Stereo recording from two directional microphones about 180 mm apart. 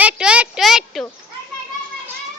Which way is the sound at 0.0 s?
5° right (ahead or behind).